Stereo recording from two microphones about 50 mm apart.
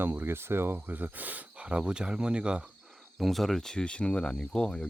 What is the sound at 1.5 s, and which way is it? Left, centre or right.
Speech, right.